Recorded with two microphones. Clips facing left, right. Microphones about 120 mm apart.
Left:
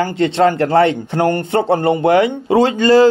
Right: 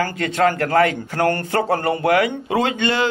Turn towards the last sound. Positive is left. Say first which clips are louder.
# left 10 dB
turn(degrees=35)  # may be behind; listen again after turning